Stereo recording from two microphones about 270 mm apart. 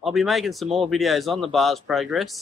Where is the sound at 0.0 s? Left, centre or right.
Centre.